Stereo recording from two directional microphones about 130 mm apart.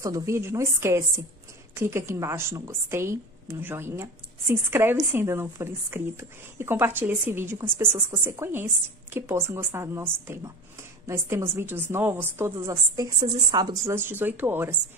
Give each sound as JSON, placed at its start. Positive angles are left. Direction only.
{"t": 0.0, "sound": "a woman's voice", "side_deg": -25}
{"t": 13.9, "sound": "speech", "side_deg": -15}